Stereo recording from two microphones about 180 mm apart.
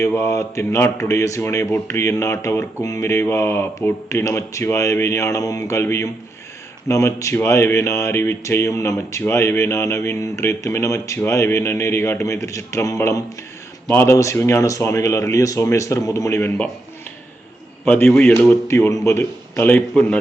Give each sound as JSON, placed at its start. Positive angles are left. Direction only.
{"t": 0.0, "sound": "speech", "side_deg": 15}
{"t": 17.8, "sound": "speech", "side_deg": 10}
{"t": 18.3, "sound": "speech", "side_deg": 15}